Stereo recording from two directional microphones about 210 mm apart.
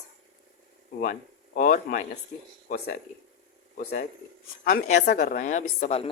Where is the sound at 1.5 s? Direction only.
35° left (ahead or behind).